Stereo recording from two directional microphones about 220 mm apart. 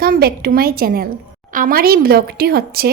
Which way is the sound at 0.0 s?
45° right (ahead or behind).